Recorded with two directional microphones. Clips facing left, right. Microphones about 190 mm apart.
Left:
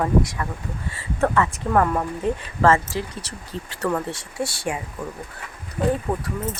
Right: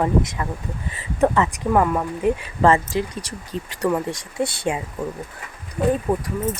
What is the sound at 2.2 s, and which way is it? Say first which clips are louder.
Speech: right 2 dB; 15° right (ahead or behind).